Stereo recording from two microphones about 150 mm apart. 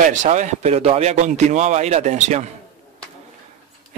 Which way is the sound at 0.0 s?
55° right (ahead or behind).